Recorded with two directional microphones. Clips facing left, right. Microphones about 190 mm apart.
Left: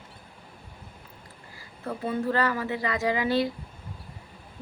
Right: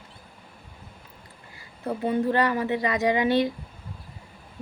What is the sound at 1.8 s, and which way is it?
Speech, 20° right (ahead or behind).